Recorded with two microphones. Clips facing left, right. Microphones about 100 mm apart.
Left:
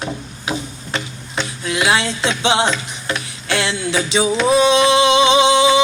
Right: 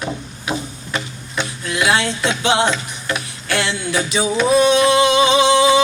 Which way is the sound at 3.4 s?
25° left (ahead or behind).